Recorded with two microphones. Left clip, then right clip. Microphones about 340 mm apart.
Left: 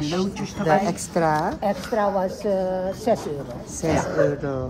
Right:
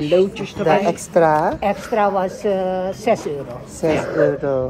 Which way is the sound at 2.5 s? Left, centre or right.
Right.